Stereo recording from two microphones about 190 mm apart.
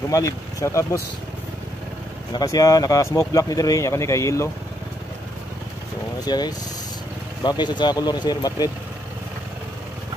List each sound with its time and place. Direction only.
0.1 s speech: 20° left (ahead or behind)
2.3 s speech: 20° left (ahead or behind)
6.2 s speech: 20° left (ahead or behind)